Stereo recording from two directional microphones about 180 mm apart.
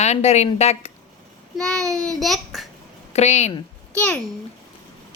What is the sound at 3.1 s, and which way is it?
Speech, 40° left (ahead or behind).